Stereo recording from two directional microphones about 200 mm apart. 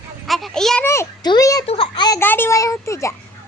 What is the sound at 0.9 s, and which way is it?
A child's voice, 15° left (ahead or behind).